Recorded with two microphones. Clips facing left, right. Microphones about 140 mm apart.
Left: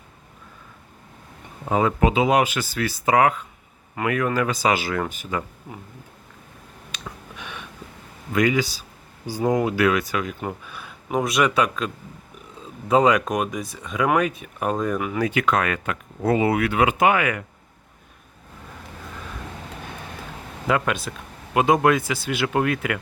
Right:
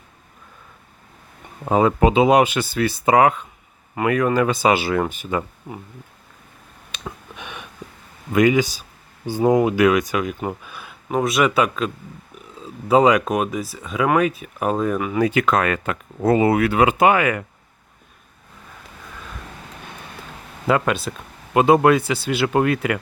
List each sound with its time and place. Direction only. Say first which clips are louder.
1.7 s speech: right 4 dB; 30° right (ahead or behind)
6.9 s a sound: right 4 dB; 20° right (ahead or behind)
8.3 s speech: right 4 dB; 20° right (ahead or behind); by 11.9 s 5° right (ahead or behind)
12.9 s speech: right 3 dB; 10° right (ahead or behind)
15.3 s speech: right 3 dB; 40° right (ahead or behind)
20.7 s speech: right 3 dB; 35° right (ahead or behind)